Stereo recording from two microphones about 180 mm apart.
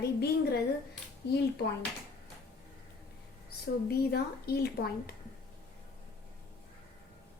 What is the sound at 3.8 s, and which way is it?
A woman's voice, 60° left (ahead or behind).